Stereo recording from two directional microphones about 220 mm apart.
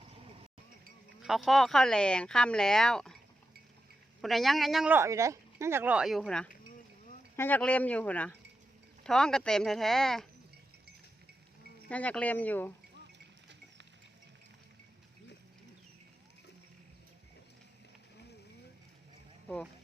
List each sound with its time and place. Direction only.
1.2 s speech: centre (ahead or behind)
4.2 s speech: centre (ahead or behind)
11.9 s speech: 5° left (ahead or behind)
13.1 s a sound: 55° right (ahead or behind)